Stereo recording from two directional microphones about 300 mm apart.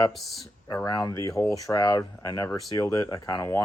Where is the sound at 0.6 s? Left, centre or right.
Centre.